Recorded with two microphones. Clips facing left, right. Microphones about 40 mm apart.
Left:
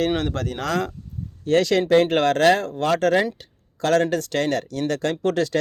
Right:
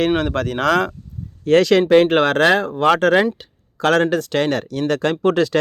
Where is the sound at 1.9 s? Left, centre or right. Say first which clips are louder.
Right 4 dB; right.